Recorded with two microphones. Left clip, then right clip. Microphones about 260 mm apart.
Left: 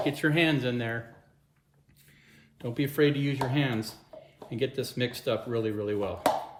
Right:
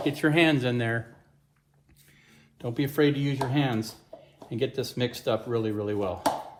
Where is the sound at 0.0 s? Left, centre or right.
Right.